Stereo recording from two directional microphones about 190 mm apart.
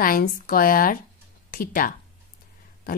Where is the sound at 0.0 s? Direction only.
50° left (ahead or behind).